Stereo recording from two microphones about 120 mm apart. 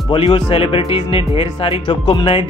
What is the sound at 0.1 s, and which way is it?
Speech, 50° left (ahead or behind).